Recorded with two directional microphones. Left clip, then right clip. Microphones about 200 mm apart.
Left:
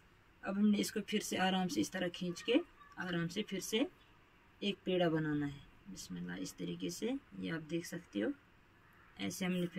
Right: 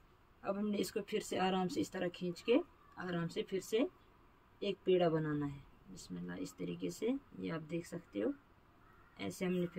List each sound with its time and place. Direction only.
0.4 s speech: 25° right (ahead or behind)